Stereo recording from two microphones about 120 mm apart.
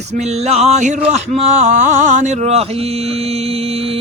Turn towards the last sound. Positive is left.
turn(degrees=-55)  # may be behind; listen again after turning